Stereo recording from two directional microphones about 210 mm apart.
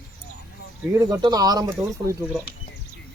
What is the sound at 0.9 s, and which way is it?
Speech, 15° right (ahead or behind).